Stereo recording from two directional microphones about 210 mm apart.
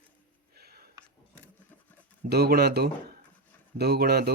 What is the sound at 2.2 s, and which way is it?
Speech, 50° right (ahead or behind).